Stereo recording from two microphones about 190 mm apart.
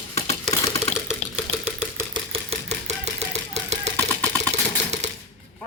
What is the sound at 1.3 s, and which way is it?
Typewriter, 5° right (ahead or behind).